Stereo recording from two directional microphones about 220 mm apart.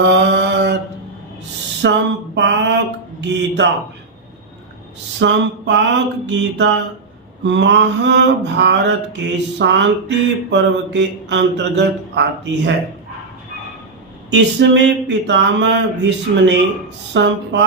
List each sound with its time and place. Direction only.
0.0 s mantra: 50° right (ahead or behind)
1.8 s mantra: 55° right (ahead or behind)
5.2 s mantra: 55° right (ahead or behind)
14.3 s mantra: 55° right (ahead or behind)